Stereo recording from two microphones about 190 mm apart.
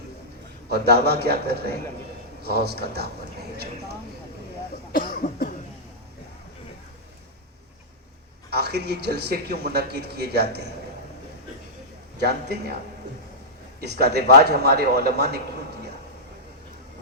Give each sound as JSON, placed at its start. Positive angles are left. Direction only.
{"t": 0.7, "sound": "speech", "side_deg": -60}
{"t": 4.9, "sound": "cough", "side_deg": 50}
{"t": 8.4, "sound": "speech", "side_deg": -55}
{"t": 12.2, "sound": "speech", "side_deg": -60}
{"t": 13.8, "sound": "speech", "side_deg": -60}